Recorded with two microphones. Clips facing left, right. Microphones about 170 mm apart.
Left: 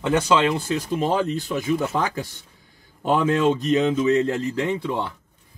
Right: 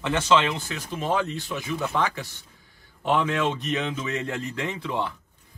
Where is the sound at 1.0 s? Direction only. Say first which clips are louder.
Left 1 dB; 40° left (ahead or behind).